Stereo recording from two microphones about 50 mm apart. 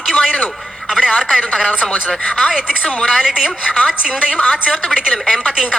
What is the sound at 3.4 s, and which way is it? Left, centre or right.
A woman's voice, left.